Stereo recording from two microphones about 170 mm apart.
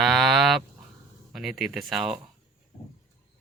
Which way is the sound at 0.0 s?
Centre (ahead or behind).